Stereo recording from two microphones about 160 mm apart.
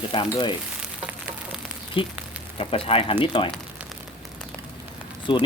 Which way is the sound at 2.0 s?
35° left (ahead or behind).